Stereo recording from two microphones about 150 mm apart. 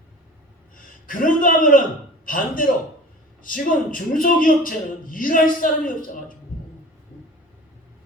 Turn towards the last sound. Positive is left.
turn(degrees=65)  # may be behind; listen again after turning